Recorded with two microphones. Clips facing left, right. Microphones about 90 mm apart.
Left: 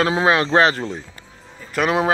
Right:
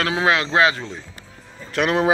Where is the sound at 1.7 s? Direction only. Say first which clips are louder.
Even; 5° left (ahead or behind).